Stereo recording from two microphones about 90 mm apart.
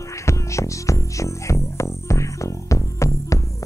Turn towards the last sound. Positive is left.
turn(degrees=35)  # may be behind; listen again after turning